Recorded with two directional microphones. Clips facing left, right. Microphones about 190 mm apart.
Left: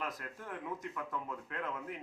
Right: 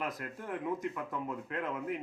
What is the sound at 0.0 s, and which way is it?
Speech, 15° right (ahead or behind).